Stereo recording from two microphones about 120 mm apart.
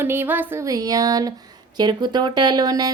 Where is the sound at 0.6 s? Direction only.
30° right (ahead or behind).